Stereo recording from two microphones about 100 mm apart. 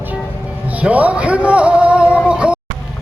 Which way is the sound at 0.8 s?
15° right (ahead or behind).